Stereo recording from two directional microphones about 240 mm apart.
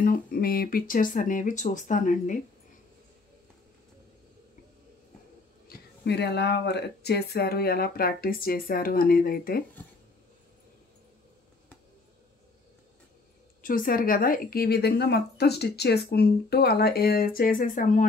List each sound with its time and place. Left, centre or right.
0.0 s speech: left
5.7 s speech: left
13.6 s speech: left